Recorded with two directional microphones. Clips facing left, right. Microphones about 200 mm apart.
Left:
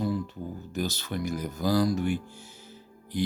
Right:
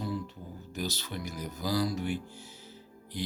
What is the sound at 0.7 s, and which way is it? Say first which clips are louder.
Speech: left 4 dB; 50° left (ahead or behind).